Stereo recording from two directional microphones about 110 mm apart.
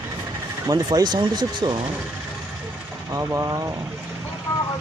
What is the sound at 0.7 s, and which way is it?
Speech, 35° right (ahead or behind).